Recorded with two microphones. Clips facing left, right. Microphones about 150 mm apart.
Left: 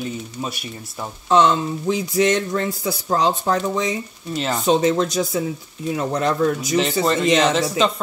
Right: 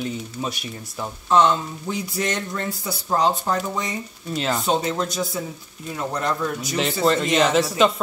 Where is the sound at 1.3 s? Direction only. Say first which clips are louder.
Left 2 dB; 90° left.